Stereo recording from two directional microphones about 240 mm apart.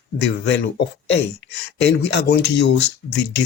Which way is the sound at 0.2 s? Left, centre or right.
Left.